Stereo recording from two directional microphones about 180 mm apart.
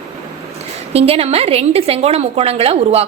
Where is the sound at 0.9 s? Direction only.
35° right (ahead or behind).